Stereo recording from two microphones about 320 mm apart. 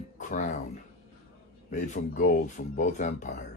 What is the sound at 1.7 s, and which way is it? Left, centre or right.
Speech, left.